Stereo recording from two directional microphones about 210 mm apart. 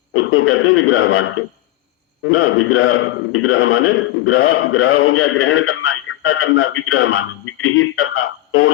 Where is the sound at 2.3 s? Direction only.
75° left (ahead or behind).